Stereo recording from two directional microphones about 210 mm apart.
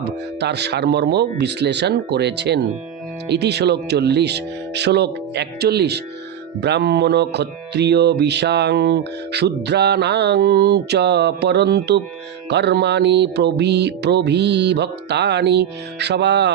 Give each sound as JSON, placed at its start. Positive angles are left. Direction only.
{"t": 0.0, "sound": "speech", "side_deg": -50}